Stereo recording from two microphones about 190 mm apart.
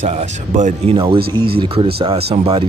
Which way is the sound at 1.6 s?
30° right (ahead or behind).